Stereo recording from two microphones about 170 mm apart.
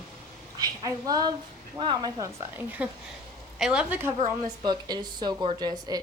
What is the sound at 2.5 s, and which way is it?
A woman's voice, 10° right (ahead or behind).